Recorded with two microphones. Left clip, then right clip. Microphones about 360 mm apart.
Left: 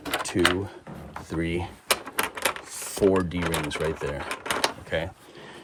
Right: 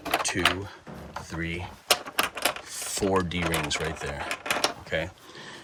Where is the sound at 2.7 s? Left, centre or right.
Centre.